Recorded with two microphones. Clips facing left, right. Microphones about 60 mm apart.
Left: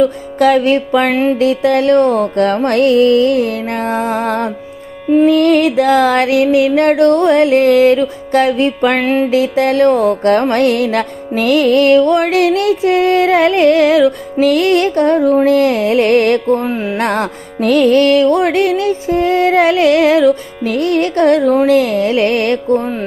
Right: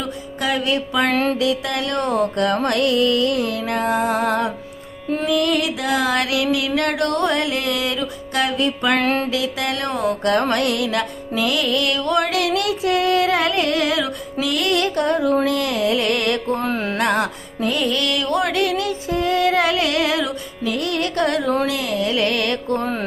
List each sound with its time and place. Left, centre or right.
0.3 s music: left
0.6 s music: left
1.1 s music: centre
1.4 s music: left
9.0 s music: centre
9.3 s music: left
16.6 s music: centre
17.0 s music: left
17.6 s music: left
17.8 s music: left